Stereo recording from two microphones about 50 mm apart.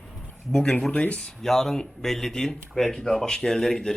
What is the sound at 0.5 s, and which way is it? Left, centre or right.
Speech, centre.